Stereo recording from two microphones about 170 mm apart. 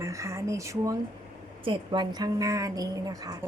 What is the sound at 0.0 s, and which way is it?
A woman's voice, 20° right (ahead or behind).